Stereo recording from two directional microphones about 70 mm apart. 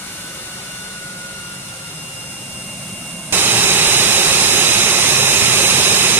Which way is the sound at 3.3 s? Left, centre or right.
Right.